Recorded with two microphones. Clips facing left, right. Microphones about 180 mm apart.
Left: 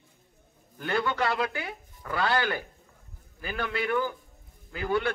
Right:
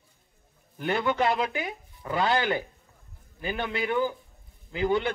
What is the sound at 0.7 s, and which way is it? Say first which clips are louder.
A man's voice: right 2 dB; 20° right (ahead or behind).